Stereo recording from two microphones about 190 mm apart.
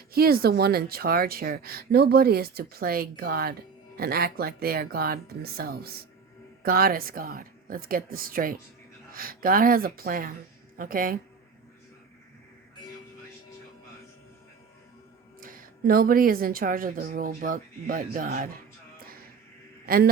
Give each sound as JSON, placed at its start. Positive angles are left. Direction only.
{"t": 0.1, "sound": "speech", "side_deg": -55}
{"t": 15.4, "sound": "speech", "side_deg": -50}
{"t": 18.9, "sound": "music", "side_deg": -50}
{"t": 19.8, "sound": "a sound", "side_deg": -50}